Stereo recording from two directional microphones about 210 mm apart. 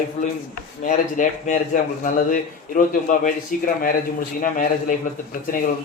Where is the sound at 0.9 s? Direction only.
35° left (ahead or behind).